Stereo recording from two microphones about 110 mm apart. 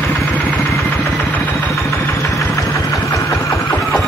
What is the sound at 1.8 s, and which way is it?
Engine, 30° left (ahead or behind).